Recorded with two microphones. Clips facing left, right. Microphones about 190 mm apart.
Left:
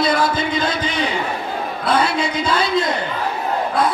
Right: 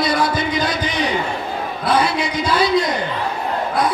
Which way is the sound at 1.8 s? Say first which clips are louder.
Even; 25° left (ahead or behind).